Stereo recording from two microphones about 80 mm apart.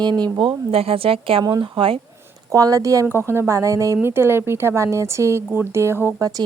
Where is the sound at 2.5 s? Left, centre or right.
Right.